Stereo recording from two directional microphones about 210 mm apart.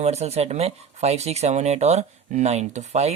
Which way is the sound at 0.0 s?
30° right (ahead or behind).